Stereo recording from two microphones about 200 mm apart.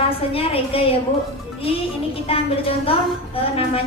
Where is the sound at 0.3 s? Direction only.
30° left (ahead or behind).